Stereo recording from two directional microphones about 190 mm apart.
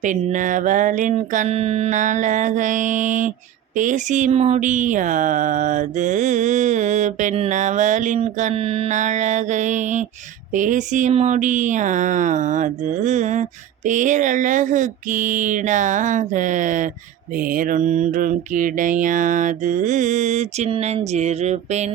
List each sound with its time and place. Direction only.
0.0 s speech: 40° right (ahead or behind)